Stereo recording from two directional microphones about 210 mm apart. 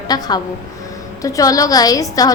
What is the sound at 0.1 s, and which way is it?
A woman's voice, 20° left (ahead or behind).